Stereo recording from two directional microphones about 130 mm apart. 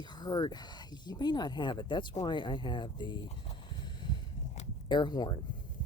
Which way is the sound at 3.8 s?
35° left (ahead or behind).